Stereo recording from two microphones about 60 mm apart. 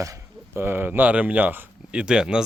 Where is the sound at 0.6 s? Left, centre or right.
Right.